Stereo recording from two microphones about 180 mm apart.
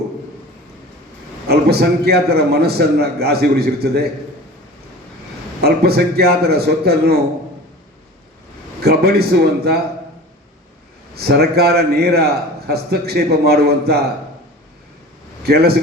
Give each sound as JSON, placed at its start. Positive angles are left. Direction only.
{"t": 1.5, "sound": "a man's voice", "side_deg": -60}
{"t": 5.6, "sound": "a man's voice", "side_deg": -60}
{"t": 8.8, "sound": "a man's voice", "side_deg": -60}
{"t": 11.1, "sound": "a man's voice", "side_deg": -60}
{"t": 15.4, "sound": "a man's voice", "side_deg": -60}